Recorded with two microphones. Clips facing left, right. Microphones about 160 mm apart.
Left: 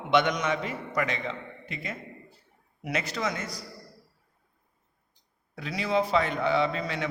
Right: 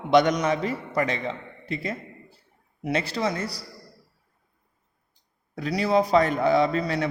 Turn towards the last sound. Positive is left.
turn(degrees=-40)  # may be behind; listen again after turning